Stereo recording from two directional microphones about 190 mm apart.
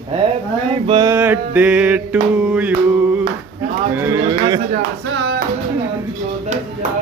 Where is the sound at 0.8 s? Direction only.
20° right (ahead or behind).